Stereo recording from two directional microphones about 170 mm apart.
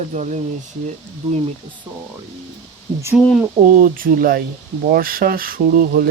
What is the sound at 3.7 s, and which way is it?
Speech, 55° right (ahead or behind).